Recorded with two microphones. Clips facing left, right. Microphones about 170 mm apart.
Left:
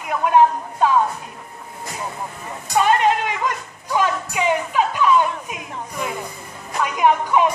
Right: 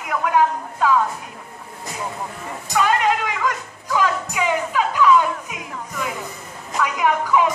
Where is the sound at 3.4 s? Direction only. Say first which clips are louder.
Right 1 dB; 25° left (ahead or behind).